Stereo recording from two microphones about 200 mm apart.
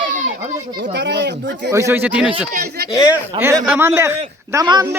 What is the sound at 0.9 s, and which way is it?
Speech, 60° right (ahead or behind).